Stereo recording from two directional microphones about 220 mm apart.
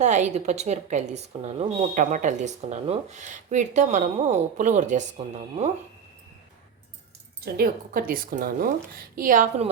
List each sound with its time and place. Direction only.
0.0 s speech: 30° right (ahead or behind)
7.4 s speech: 45° right (ahead or behind)